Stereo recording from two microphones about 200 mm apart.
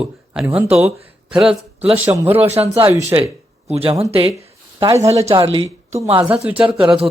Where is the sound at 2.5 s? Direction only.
30° right (ahead or behind).